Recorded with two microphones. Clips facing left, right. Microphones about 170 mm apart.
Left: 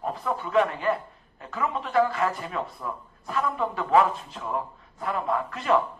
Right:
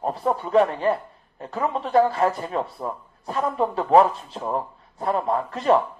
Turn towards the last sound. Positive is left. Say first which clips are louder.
# right 5 dB
turn(degrees=-35)  # may be behind; listen again after turning